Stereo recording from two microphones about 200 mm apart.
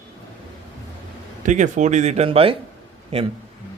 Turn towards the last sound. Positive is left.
turn(degrees=-30)  # may be behind; listen again after turning